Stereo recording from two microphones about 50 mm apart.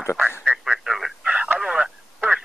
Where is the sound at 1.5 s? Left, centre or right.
Centre.